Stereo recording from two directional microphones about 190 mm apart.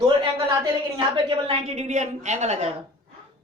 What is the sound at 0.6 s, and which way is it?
A woman's voice, 25° right (ahead or behind).